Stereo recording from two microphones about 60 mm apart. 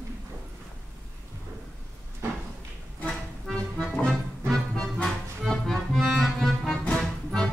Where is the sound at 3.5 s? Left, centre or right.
Centre.